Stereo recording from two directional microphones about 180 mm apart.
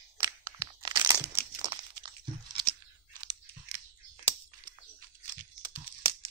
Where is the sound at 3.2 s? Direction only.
20° right (ahead or behind).